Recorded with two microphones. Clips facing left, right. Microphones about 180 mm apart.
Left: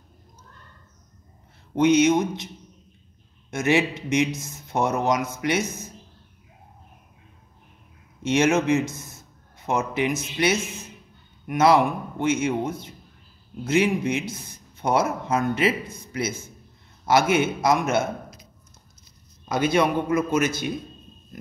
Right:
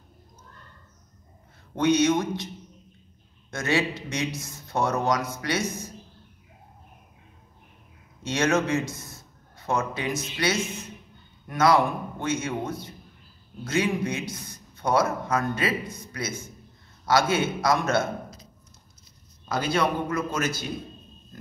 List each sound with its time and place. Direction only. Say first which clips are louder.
1.8 s a man's voice: left 3 dB; 20° left (ahead or behind)
8.2 s a man's voice: left 4 dB; 20° left (ahead or behind)
19.5 s a man's voice: left 4 dB; 20° left (ahead or behind)